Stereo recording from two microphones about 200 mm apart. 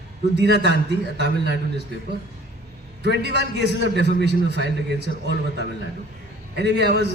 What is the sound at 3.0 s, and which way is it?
A man's voice, 55° right (ahead or behind).